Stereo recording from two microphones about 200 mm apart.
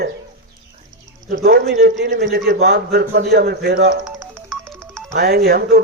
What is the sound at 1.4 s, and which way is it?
A man's voice, 55° right (ahead or behind).